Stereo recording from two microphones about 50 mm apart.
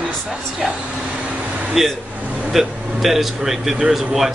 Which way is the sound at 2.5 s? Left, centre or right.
Centre.